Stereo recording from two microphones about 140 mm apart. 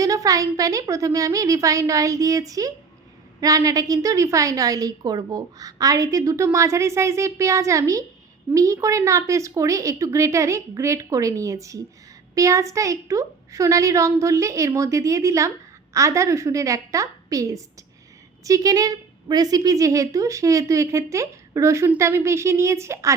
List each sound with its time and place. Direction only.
0.0 s a woman's voice: 25° right (ahead or behind)